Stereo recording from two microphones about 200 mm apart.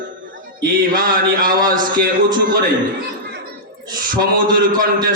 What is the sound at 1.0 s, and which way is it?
Speech, 45° right (ahead or behind).